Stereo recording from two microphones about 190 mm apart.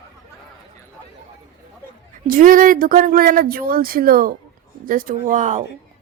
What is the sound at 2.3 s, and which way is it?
Speech, 45° right (ahead or behind).